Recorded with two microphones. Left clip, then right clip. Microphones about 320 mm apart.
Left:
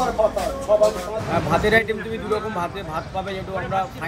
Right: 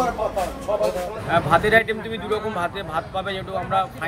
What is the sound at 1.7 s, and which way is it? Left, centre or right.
Speech, centre.